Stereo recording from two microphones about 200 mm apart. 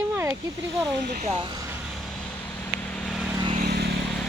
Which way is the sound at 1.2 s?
25° right (ahead or behind).